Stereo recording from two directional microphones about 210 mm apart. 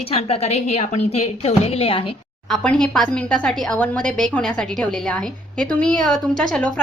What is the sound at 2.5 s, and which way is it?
Speech, centre (ahead or behind).